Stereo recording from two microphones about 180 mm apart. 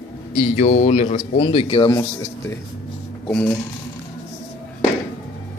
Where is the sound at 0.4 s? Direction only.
40° left (ahead or behind); by 2.0 s 25° left (ahead or behind).